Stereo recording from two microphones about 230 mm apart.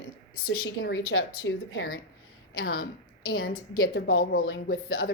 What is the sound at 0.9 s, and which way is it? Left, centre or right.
Speech, left.